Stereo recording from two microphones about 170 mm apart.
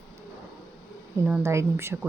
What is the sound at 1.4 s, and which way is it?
Speech, 15° right (ahead or behind).